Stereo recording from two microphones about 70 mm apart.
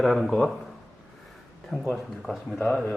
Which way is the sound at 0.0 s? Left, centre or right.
Centre.